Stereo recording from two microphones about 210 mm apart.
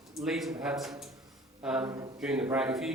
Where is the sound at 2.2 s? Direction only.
5° right (ahead or behind).